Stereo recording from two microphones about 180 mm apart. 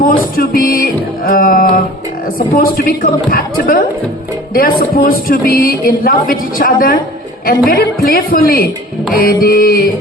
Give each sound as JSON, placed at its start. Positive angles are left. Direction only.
{"t": 0.0, "sound": "a woman's voice", "side_deg": 50}